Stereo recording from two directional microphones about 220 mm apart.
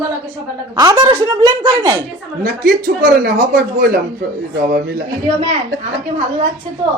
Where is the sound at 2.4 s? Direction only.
40° right (ahead or behind).